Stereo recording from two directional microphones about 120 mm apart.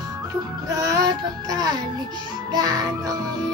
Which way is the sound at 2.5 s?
35° right (ahead or behind).